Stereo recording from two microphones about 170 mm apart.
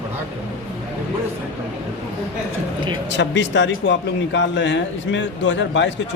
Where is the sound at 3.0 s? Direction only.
90° left.